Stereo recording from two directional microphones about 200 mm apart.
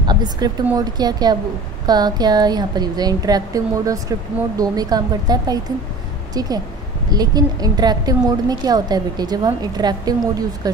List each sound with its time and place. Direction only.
0.0 s a woman's voice: 20° right (ahead or behind)